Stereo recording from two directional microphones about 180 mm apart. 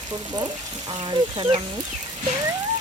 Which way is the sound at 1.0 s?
25° right (ahead or behind).